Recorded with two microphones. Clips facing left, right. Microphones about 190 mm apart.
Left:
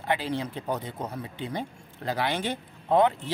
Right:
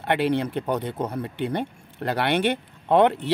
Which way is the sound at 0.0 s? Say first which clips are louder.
Right 6 dB; 65° right (ahead or behind).